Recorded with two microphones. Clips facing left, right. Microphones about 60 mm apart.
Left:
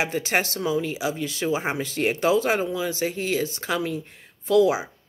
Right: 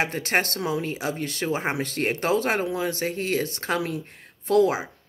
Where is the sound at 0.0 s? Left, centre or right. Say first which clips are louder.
Even; right.